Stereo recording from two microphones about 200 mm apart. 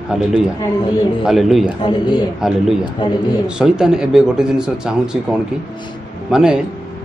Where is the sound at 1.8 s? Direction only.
20° left (ahead or behind).